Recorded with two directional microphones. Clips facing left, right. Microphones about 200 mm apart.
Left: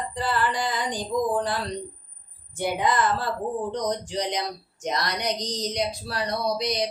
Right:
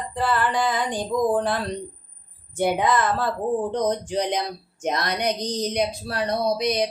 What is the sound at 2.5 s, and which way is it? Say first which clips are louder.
Speech: right 3 dB; 55° right (ahead or behind).